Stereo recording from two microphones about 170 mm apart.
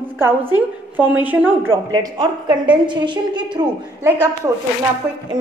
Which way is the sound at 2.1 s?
25° right (ahead or behind).